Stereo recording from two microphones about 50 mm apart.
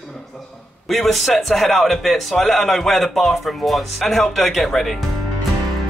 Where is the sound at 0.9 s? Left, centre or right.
Centre.